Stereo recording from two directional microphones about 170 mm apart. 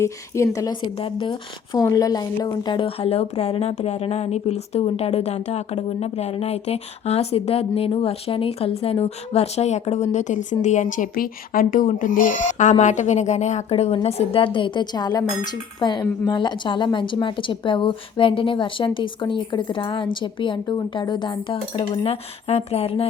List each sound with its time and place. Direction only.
0.0 s a woman's voice: 15° left (ahead or behind); by 23.0 s 35° left (ahead or behind)